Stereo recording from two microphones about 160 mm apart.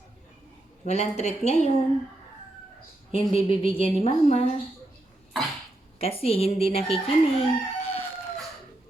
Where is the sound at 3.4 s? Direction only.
35° left (ahead or behind).